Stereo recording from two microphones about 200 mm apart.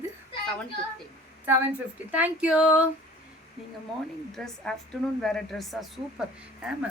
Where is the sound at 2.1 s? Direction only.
5° right (ahead or behind).